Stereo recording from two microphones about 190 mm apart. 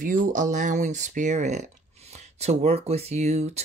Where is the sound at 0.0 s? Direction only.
45° right (ahead or behind).